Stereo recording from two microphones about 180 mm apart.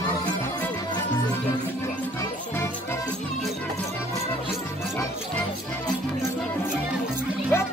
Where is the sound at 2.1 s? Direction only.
15° left (ahead or behind).